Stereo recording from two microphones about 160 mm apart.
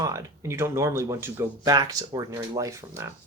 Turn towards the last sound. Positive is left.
turn(degrees=-20)  # may be behind; listen again after turning